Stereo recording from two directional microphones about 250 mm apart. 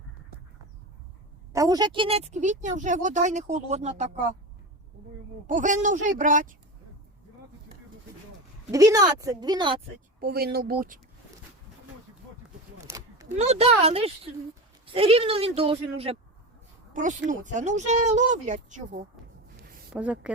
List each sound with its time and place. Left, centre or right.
1.5 s speech: centre
5.5 s speech: right
8.7 s speech: centre
10.2 s speech: right
12.8 s a sound: centre
13.2 s speech: right
19.9 s speech: centre